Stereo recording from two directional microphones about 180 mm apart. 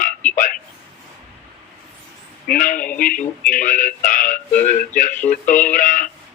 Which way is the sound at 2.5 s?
50° left (ahead or behind).